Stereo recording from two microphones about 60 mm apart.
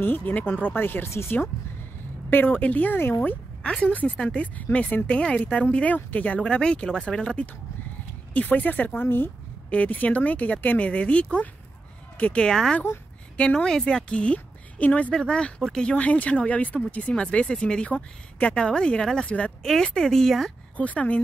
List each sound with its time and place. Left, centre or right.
0.0 s speech: left
2.3 s speech: left
3.6 s speech: centre
6.4 s a woman's voice: centre
8.3 s a woman's voice: left
19.6 s a woman's voice: centre
20.7 s speech: left